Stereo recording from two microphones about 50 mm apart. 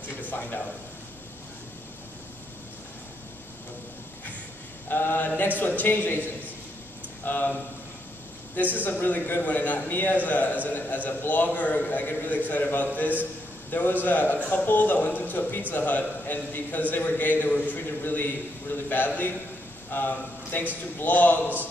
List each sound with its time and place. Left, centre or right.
0.2 s a sound: left
4.8 s mantra: left
5.6 s a man's voice: left
7.2 s a man's voice: left
8.7 s a man's voice: left